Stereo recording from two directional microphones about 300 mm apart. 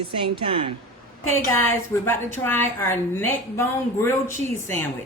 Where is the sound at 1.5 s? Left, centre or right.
Centre.